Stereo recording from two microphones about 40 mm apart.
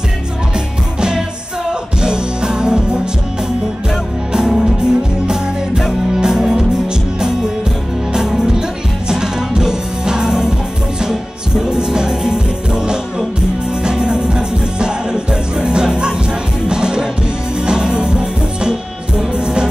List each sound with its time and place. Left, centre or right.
1.7 s music: centre
4.3 s music: centre
8.1 s music: centre